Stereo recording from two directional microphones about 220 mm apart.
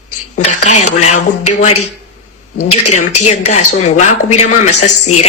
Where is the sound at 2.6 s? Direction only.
90° left.